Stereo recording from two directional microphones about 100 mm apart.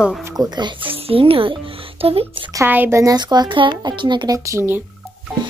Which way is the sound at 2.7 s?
20° right (ahead or behind).